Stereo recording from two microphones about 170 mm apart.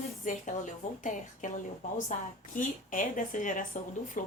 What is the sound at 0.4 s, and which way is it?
Speech, 50° left (ahead or behind).